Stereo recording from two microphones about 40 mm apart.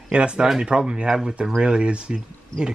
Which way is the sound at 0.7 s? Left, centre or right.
Right.